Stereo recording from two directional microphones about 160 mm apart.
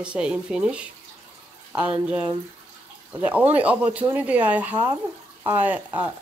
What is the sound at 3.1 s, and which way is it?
Speech, 10° right (ahead or behind).